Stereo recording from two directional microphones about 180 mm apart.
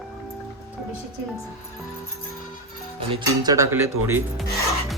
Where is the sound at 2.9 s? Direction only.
25° right (ahead or behind).